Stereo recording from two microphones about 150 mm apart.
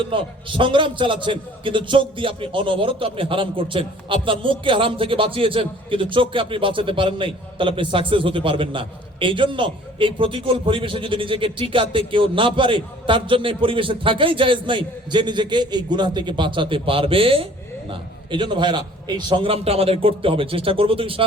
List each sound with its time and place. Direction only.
0.0 s a man's voice: 35° right (ahead or behind)